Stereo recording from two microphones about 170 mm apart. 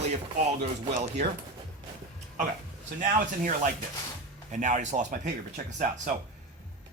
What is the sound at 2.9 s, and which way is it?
Speech, 50° right (ahead or behind).